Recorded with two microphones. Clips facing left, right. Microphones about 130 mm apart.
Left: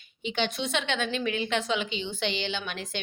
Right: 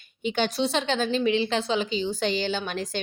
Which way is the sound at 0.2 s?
45° right (ahead or behind).